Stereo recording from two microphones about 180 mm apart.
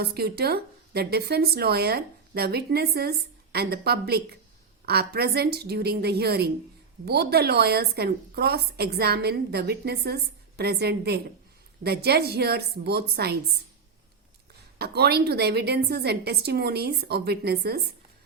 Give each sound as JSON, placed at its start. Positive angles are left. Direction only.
{"t": 0.0, "sound": "speech", "side_deg": -65}
{"t": 14.8, "sound": "speech", "side_deg": -65}